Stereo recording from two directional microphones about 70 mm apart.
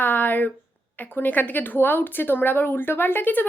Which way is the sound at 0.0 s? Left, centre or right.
Left.